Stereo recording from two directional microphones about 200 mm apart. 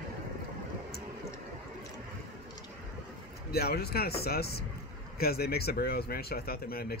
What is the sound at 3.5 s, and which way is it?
Speech, 50° left (ahead or behind).